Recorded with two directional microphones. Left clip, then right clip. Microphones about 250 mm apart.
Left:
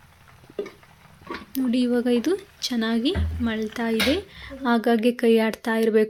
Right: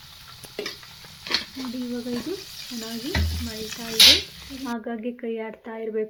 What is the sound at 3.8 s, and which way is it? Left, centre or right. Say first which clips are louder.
Speech: right 8 dB; left.